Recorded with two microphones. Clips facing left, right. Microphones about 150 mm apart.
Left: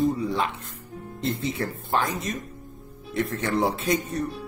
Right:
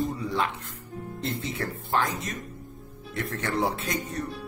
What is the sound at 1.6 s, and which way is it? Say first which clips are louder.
A man's voice: left 1 dB; 15° left (ahead or behind).